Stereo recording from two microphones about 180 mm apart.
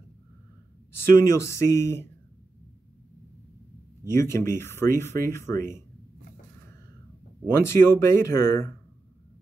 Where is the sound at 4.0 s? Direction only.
15° left (ahead or behind).